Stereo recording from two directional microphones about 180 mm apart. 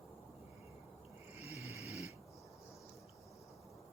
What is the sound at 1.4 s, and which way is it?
Snoring, 35° left (ahead or behind).